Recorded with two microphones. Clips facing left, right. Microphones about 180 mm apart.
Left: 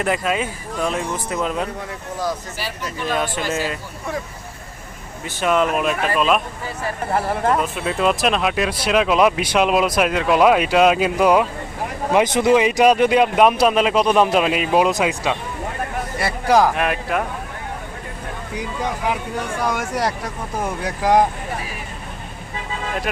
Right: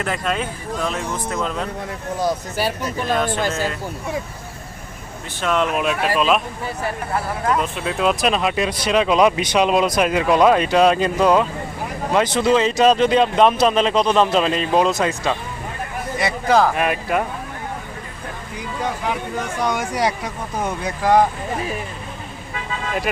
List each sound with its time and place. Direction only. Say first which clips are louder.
0.0 s speech: left 2 dB; 5° left (ahead or behind)
3.2 s speech: even; 10° left (ahead or behind)
5.4 s speech: left 2 dB; 5° left (ahead or behind)
7.1 s speech: left 3 dB; 30° left (ahead or behind)
7.6 s speech: left 1 dB; centre (ahead or behind)
16.7 s speech: right 1 dB; centre (ahead or behind)
19.6 s speech: right 2 dB; centre (ahead or behind)
21.0 s speech: even; 15° left (ahead or behind)